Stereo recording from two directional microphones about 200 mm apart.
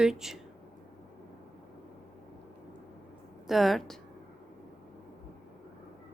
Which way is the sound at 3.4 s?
Centre (ahead or behind).